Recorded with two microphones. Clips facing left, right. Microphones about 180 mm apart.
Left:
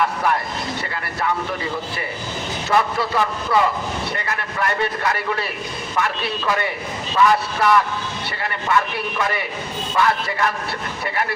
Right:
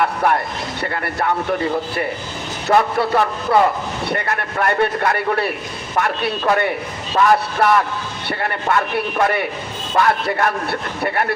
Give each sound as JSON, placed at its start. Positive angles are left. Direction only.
{"t": 0.2, "sound": "a man's voice", "side_deg": -55}